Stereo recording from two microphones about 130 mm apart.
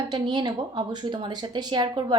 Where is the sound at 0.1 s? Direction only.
35° right (ahead or behind).